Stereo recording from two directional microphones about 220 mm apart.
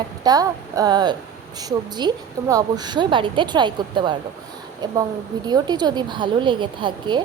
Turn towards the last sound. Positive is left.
turn(degrees=-20)  # may be behind; listen again after turning